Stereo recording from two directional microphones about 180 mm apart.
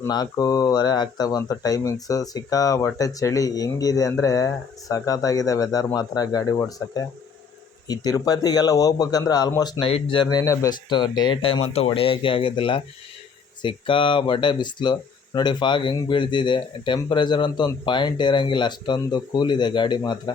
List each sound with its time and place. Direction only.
0.0 s speech: 20° left (ahead or behind)